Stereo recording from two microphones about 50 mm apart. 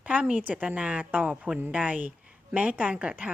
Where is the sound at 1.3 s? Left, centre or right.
Centre.